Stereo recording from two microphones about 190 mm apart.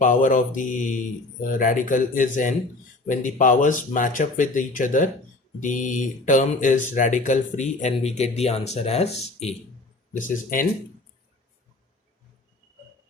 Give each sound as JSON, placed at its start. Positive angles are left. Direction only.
{"t": 0.0, "sound": "speech", "side_deg": 45}
{"t": 10.2, "sound": "speech", "side_deg": 45}